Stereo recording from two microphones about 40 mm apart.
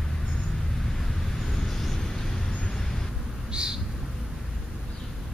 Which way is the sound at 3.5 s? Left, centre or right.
Right.